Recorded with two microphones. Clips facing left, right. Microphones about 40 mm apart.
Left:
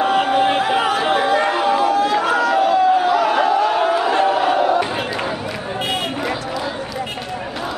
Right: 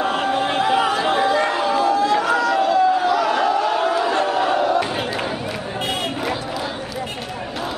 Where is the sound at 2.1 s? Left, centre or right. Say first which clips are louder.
Left 1 dB; centre.